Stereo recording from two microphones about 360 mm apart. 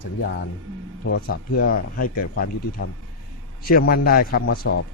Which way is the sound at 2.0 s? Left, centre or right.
Left.